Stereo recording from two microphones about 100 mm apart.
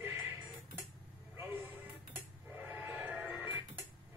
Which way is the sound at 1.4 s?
15° right (ahead or behind).